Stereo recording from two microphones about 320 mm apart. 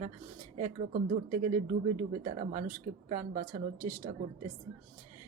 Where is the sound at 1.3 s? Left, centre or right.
Right.